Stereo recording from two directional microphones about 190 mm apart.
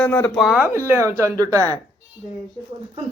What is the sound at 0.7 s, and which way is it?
Speech, 15° right (ahead or behind).